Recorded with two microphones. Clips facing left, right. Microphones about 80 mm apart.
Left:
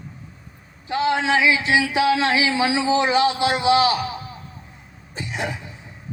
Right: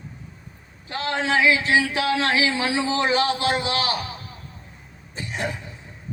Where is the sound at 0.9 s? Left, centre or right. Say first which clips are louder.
Left 5 dB; centre.